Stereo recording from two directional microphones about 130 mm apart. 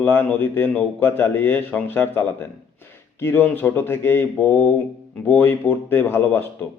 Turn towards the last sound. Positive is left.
turn(degrees=15)  # may be behind; listen again after turning